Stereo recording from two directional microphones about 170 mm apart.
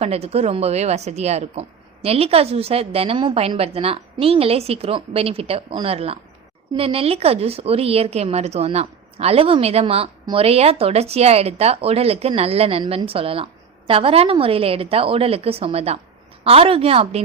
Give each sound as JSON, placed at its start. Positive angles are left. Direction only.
{"t": 0.0, "sound": "a woman's voice", "side_deg": -35}